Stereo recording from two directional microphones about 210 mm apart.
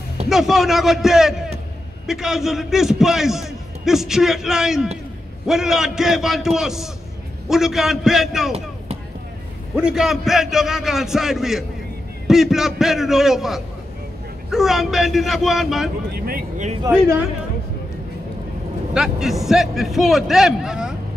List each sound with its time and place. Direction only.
0.3 s a man's voice: centre (ahead or behind)
9.8 s a man's voice: 5° right (ahead or behind)
16.3 s speech: 40° right (ahead or behind)
18.9 s a man's voice: centre (ahead or behind)